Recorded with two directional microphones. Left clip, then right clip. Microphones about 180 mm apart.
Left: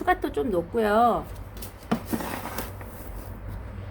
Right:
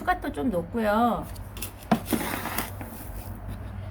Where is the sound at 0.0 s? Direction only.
35° left (ahead or behind).